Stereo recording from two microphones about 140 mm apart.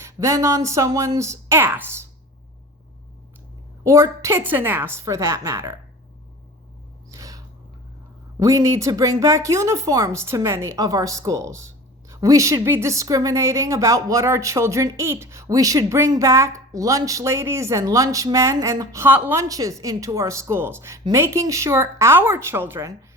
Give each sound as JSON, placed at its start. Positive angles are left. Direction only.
{"t": 0.0, "sound": "speech", "side_deg": -20}
{"t": 3.8, "sound": "speech", "side_deg": -20}
{"t": 7.1, "sound": "a sound", "side_deg": -25}
{"t": 8.4, "sound": "speech", "side_deg": -25}